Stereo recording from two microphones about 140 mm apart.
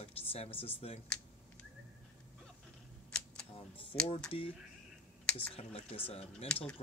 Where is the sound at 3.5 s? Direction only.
40° left (ahead or behind).